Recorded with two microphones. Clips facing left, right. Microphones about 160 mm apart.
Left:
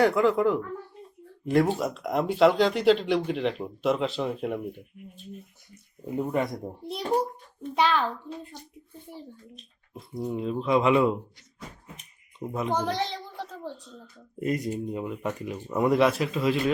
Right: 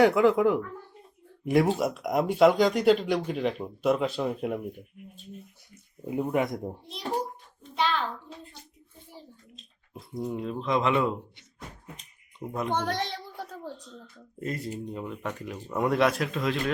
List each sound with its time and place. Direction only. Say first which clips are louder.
0.0 s speech: right 1 dB; 15° right (ahead or behind)
6.1 s speech: even; 10° right (ahead or behind)
7.6 s a child's voice: left 4 dB; 55° left (ahead or behind)
9.9 s speech: left 1 dB; centre (ahead or behind)
12.4 s speech: left 1 dB; centre (ahead or behind)
13.3 s a sound: left 1 dB; 10° right (ahead or behind)
13.8 s speech: even; 10° left (ahead or behind)